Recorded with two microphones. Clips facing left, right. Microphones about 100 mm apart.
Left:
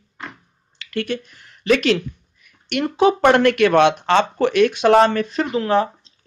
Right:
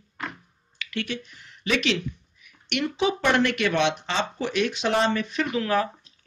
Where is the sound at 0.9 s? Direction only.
45° left (ahead or behind).